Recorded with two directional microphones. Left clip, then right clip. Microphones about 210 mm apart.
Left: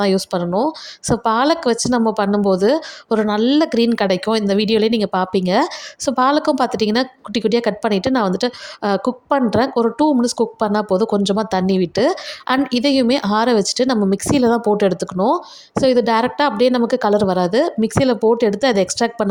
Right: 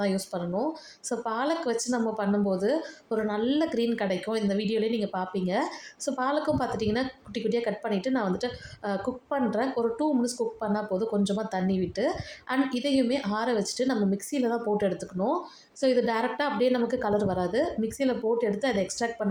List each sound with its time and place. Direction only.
0.0 s speech: 45° left (ahead or behind)